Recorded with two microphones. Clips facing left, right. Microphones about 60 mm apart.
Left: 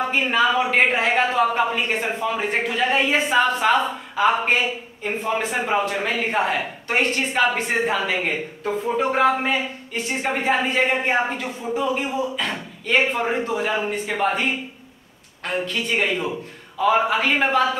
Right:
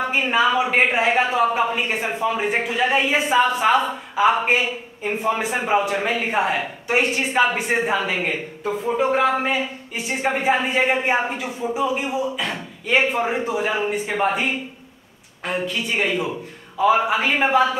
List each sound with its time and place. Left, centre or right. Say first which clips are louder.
0.1 s speech: right 1 dB; centre